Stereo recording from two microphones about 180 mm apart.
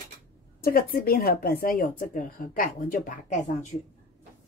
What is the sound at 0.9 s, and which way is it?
A woman's voice, 55° left (ahead or behind).